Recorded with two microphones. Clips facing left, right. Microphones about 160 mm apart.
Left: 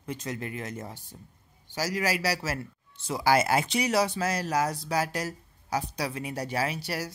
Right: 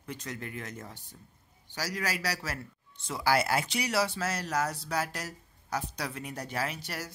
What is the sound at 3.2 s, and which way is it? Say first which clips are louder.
Speech: left 4 dB; 20° left (ahead or behind).